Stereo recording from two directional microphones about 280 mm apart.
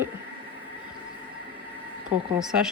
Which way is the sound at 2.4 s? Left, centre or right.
Centre.